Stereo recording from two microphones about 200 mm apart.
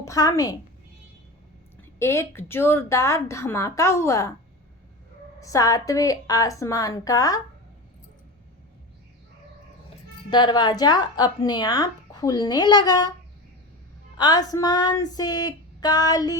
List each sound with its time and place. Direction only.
0.0 s speech: 15° left (ahead or behind)
2.0 s speech: 15° left (ahead or behind)
5.4 s speech: 15° left (ahead or behind)
10.2 s a woman's voice: 20° left (ahead or behind)
14.2 s a woman's voice: 20° left (ahead or behind)